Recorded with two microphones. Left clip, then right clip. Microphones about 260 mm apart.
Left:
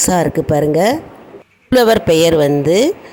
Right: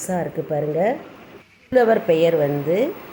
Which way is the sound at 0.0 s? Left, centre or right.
Left.